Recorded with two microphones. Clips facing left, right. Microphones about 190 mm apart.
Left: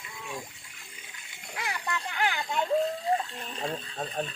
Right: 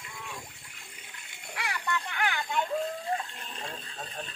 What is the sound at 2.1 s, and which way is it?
Speech, 40° left (ahead or behind).